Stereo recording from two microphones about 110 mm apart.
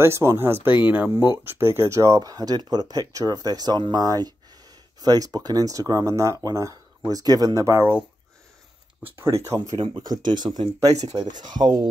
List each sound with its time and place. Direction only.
0.0 s speech: 25° right (ahead or behind)
9.0 s speech: 25° right (ahead or behind)
9.8 s speech: 40° right (ahead or behind)